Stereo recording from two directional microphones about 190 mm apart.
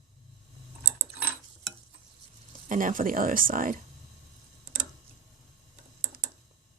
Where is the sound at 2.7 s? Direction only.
45° right (ahead or behind).